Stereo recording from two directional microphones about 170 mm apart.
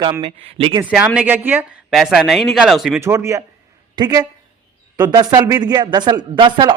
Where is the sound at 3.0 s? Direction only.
15° right (ahead or behind).